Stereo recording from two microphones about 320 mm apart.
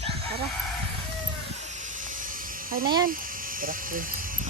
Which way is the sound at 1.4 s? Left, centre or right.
Right.